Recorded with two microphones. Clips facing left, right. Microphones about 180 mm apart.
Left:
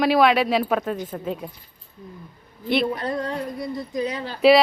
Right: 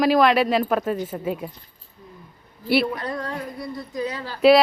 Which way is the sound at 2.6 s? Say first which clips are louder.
Right 1 dB; 5° right (ahead or behind).